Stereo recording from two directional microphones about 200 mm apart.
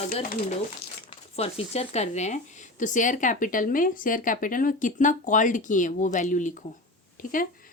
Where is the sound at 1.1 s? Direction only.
30° left (ahead or behind).